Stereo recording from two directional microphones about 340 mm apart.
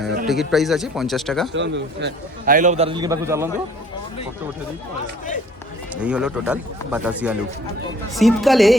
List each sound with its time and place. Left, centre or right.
0.3 s speech: centre
1.5 s a man's voice: right; by 3.5 s centre
6.0 s speech: centre